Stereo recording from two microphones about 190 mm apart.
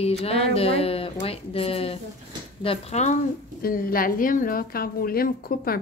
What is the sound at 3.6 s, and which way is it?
A woman's voice, 50° left (ahead or behind).